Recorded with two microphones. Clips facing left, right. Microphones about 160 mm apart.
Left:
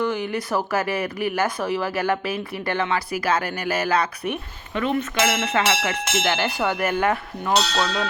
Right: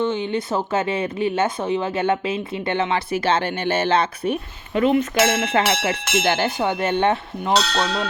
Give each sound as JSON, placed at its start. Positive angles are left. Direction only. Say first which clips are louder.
{"t": 0.0, "sound": "speech", "louder": "right 2 dB", "side_deg": -25}